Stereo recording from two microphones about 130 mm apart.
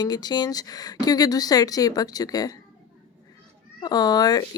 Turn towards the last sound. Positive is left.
turn(degrees=30)  # may be behind; listen again after turning